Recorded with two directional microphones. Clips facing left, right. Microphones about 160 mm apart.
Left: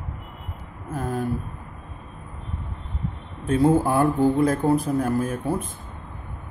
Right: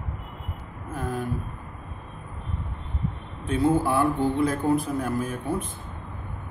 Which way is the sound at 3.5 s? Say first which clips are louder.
Left 3 dB; 45° left (ahead or behind).